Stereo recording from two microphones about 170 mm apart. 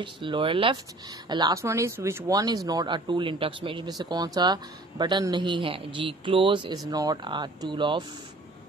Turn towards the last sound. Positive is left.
turn(degrees=-30)  # may be behind; listen again after turning